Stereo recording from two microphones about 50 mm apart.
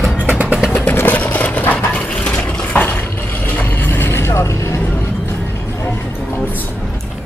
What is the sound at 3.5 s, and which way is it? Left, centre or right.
Vehicle, left.